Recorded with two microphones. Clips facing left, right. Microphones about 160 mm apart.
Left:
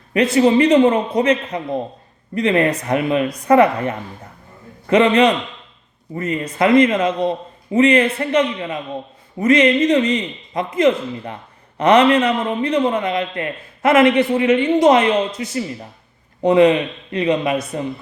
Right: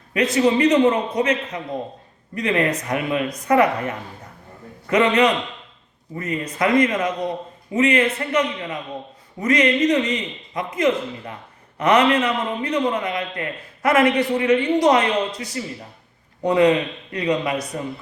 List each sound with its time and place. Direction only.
0.1 s a man's voice: 30° left (ahead or behind)